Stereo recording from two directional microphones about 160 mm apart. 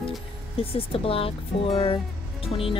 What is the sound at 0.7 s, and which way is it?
Music, 35° left (ahead or behind).